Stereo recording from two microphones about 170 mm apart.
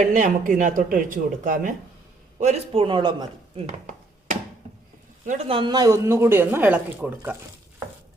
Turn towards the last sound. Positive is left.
turn(degrees=-10)  # may be behind; listen again after turning